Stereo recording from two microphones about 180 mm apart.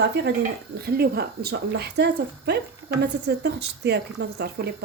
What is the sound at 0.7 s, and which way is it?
A woman's voice, 60° right (ahead or behind).